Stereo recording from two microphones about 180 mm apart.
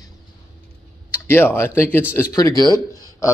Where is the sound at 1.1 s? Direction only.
10° left (ahead or behind).